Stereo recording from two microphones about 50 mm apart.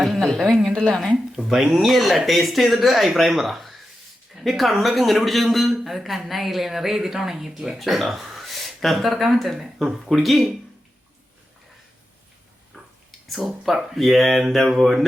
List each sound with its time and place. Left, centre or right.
0.2 s speech: centre
0.7 s a woman's voice: centre
0.9 s a woman's voice: centre
9.8 s speech: centre
10.1 s speech: centre
12.7 s speech: centre